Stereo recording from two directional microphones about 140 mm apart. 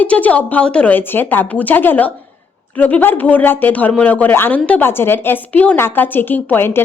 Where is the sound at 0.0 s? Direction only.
10° left (ahead or behind).